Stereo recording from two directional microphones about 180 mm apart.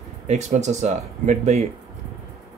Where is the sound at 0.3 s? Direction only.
40° right (ahead or behind).